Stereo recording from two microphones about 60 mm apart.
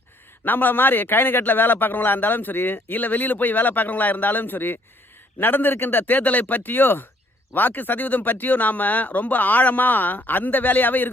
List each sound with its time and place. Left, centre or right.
0.4 s a man's voice: left